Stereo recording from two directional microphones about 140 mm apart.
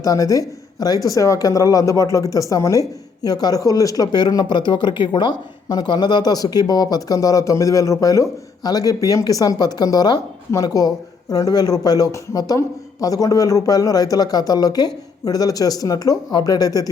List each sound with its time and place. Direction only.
0.0 s speech: 25° left (ahead or behind)